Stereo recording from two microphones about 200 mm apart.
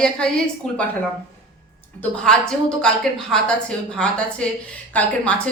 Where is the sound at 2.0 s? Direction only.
5° left (ahead or behind).